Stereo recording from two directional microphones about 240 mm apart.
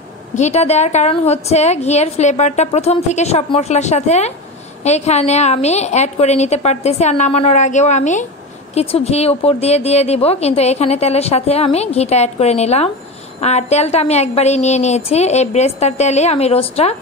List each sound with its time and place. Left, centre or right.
0.4 s speech: left